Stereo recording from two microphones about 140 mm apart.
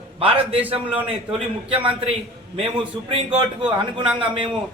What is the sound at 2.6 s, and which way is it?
Speech, 35° right (ahead or behind).